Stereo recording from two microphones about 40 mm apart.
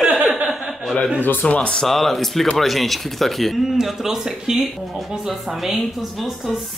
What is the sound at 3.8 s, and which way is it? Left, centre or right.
Speech, centre.